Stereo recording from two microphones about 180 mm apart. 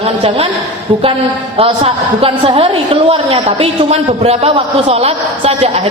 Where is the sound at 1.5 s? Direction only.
30° right (ahead or behind).